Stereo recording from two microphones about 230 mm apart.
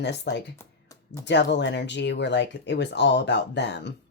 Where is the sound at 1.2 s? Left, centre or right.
Left.